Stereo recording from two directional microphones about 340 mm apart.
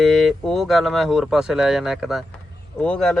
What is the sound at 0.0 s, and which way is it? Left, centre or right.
Speech, centre.